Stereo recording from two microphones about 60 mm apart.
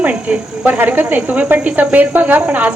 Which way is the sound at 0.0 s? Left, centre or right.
Right.